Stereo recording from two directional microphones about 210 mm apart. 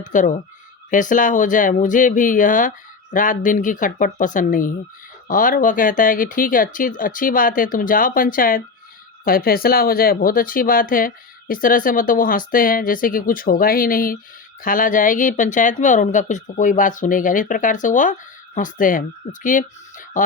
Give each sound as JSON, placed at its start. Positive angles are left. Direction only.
{"t": 0.0, "sound": "speech", "side_deg": 35}